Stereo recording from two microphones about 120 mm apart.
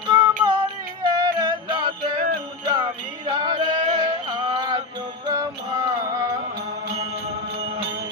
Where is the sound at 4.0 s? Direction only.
35° right (ahead or behind).